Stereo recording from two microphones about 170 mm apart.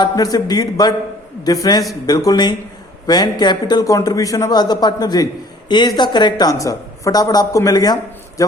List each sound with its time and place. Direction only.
0.0 s a man's voice: 20° left (ahead or behind)